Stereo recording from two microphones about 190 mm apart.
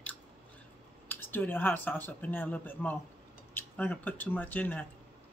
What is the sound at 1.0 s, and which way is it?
Speech, 10° left (ahead or behind).